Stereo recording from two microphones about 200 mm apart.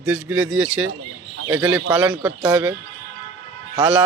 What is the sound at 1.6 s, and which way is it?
Speech, 5° right (ahead or behind).